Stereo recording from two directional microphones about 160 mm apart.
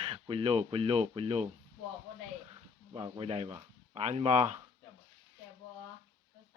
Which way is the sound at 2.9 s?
35° right (ahead or behind).